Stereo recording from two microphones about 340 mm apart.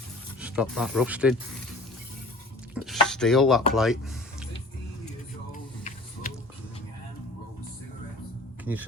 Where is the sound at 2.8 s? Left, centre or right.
Centre.